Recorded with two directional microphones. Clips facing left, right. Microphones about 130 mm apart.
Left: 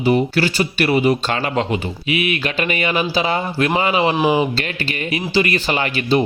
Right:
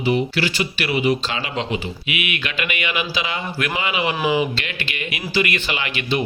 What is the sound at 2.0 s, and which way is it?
Speech, 35° left (ahead or behind).